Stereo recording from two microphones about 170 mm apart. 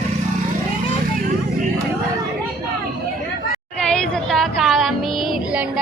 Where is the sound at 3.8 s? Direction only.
5° left (ahead or behind).